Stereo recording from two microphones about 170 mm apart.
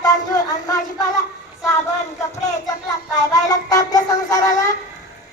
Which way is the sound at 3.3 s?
20° left (ahead or behind).